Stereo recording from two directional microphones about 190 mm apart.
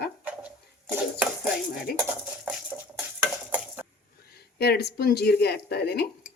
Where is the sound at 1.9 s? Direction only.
55° left (ahead or behind).